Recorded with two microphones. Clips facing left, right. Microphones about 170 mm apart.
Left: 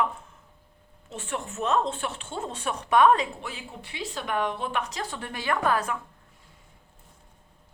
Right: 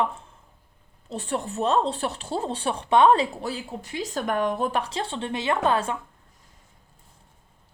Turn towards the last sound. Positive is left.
turn(degrees=-25)  # may be behind; listen again after turning